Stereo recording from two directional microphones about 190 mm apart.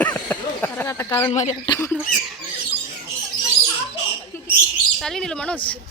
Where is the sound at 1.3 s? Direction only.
35° left (ahead or behind).